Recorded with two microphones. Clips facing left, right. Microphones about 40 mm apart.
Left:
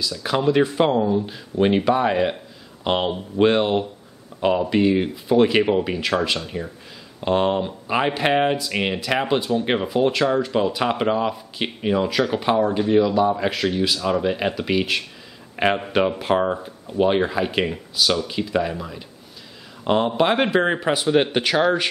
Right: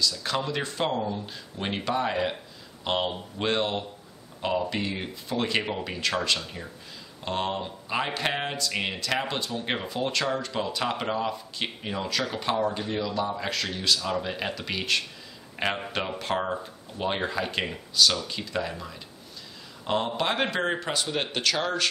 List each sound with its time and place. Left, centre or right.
0.0 s speech: centre
15.5 s a sound: centre
15.9 s speech: centre